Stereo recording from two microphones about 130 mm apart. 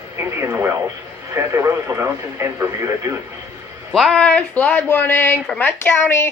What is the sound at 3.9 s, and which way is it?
Speech, 5° left (ahead or behind).